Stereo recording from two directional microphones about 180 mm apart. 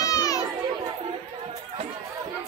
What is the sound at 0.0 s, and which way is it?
Chatter, 20° left (ahead or behind).